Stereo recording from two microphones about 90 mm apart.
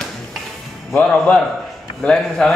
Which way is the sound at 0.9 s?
15° left (ahead or behind).